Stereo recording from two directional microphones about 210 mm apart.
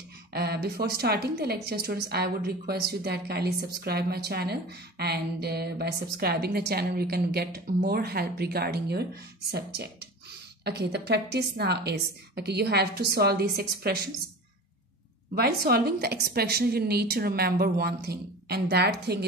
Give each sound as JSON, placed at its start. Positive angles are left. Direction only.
{"t": 0.3, "sound": "a woman's voice", "side_deg": -50}
{"t": 10.6, "sound": "a woman's voice", "side_deg": -50}
{"t": 15.3, "sound": "a woman's voice", "side_deg": -45}